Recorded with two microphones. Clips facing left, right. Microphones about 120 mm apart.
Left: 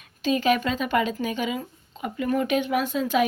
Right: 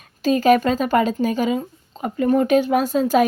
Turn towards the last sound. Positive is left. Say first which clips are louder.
# right 6 dB
turn(degrees=-40)  # may be behind; listen again after turning